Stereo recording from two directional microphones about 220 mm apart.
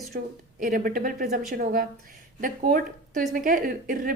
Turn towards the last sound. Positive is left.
turn(degrees=-40)  # may be behind; listen again after turning